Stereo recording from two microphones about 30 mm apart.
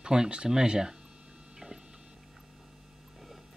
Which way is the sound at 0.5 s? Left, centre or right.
Right.